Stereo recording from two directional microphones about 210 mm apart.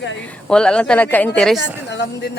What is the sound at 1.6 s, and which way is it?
Speech, 55° left (ahead or behind).